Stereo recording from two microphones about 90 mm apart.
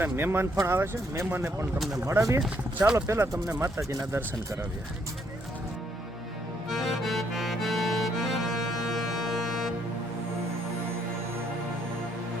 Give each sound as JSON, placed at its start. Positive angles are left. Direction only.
{"t": 0.0, "sound": "speech", "side_deg": -25}
{"t": 6.7, "sound": "accordion", "side_deg": 0}